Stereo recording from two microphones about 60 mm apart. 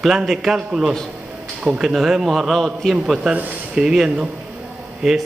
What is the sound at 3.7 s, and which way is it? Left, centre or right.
A man's voice, centre.